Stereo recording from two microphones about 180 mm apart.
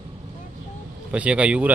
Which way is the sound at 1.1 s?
5° right (ahead or behind).